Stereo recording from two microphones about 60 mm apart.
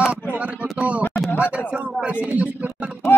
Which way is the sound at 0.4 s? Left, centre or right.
Right.